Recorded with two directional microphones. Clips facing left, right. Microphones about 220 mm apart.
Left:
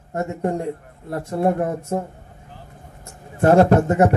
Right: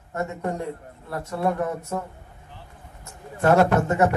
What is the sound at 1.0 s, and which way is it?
Speech, 30° left (ahead or behind).